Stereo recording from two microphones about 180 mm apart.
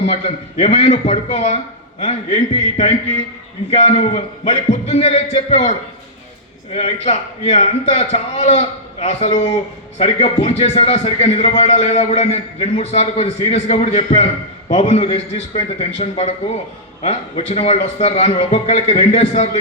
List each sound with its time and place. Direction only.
0.1 s a man's voice: 35° left (ahead or behind)
6.7 s a man's voice: 35° left (ahead or behind)